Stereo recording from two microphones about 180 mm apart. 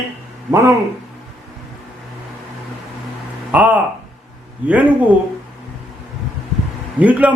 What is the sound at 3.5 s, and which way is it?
A man's voice, 10° right (ahead or behind).